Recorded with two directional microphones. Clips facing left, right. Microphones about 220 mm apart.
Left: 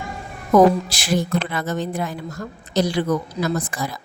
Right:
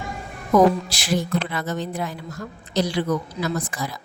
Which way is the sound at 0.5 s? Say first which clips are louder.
Left 2 dB; 50° left (ahead or behind).